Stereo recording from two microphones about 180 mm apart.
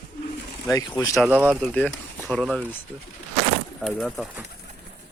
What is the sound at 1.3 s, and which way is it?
Speech, 5° right (ahead or behind).